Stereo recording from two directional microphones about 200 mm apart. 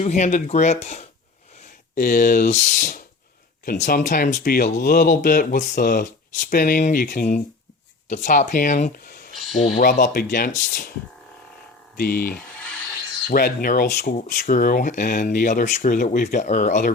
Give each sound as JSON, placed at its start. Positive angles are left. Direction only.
{"t": 0.0, "sound": "speech", "side_deg": 35}
{"t": 11.9, "sound": "speech", "side_deg": 45}